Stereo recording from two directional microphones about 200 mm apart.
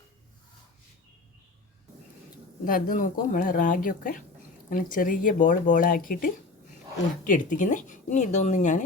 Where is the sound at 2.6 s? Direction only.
45° left (ahead or behind).